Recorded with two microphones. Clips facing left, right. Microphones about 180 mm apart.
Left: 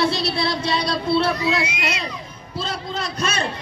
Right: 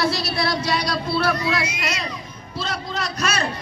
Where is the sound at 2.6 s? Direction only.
30° left (ahead or behind).